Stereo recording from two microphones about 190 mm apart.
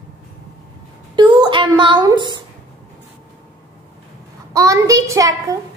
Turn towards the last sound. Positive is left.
turn(degrees=-15)  # may be behind; listen again after turning